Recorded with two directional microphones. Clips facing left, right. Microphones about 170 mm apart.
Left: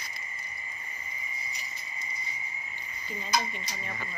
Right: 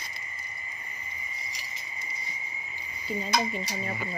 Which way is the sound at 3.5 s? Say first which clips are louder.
Right 7 dB; 30° right (ahead or behind).